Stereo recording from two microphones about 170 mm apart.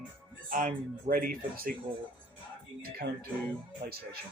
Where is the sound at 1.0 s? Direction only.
55° right (ahead or behind).